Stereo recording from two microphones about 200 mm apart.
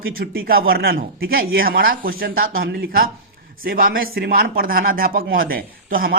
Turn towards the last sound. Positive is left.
turn(degrees=-45)  # may be behind; listen again after turning